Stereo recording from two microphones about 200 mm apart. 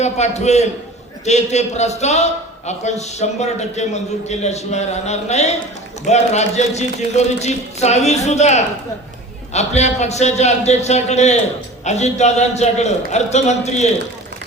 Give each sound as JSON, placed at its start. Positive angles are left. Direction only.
{"t": 0.0, "sound": "a man's voice", "side_deg": 35}